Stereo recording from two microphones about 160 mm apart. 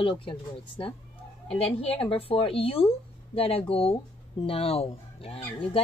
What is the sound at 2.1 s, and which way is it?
Speech, 35° left (ahead or behind).